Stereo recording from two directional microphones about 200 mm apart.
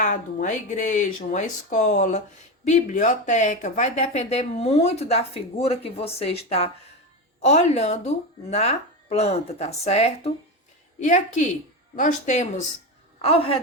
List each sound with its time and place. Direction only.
0.0 s a woman's voice: 40° left (ahead or behind)